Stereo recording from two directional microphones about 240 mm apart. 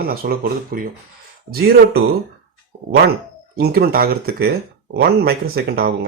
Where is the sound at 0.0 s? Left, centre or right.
Right.